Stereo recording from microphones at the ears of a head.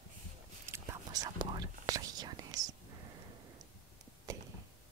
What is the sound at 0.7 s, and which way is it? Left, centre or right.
Whispering, right.